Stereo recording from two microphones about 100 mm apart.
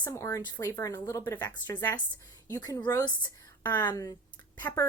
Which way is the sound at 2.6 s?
40° left (ahead or behind).